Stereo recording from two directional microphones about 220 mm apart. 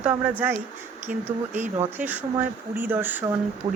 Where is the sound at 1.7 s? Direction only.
10° right (ahead or behind).